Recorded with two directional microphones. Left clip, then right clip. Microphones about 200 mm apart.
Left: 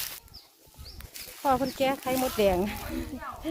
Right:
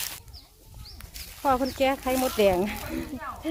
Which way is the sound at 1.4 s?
5° left (ahead or behind).